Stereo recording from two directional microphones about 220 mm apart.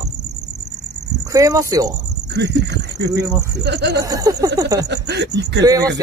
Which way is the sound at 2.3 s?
50° right (ahead or behind).